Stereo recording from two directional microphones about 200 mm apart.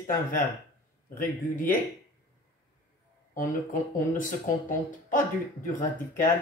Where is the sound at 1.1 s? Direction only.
45° left (ahead or behind).